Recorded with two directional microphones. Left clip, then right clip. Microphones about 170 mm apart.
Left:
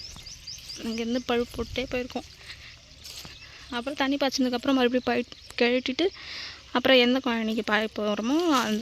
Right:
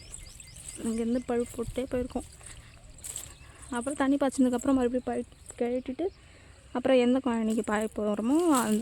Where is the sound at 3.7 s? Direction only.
5° right (ahead or behind).